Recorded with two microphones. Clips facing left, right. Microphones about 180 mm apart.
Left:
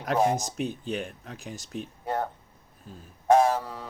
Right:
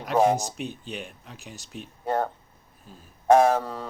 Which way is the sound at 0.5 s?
50° left (ahead or behind).